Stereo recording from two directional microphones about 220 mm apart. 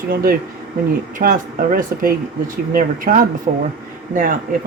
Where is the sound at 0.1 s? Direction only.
40° right (ahead or behind).